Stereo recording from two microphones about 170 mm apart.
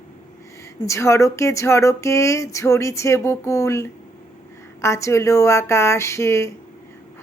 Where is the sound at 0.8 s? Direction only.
15° left (ahead or behind).